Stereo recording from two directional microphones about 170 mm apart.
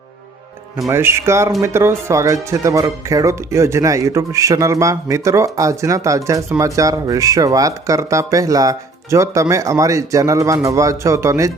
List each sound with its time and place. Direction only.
0.9 s speech: 15° right (ahead or behind)